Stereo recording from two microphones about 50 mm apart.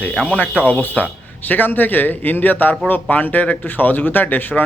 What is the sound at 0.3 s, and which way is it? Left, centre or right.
A man's voice, left.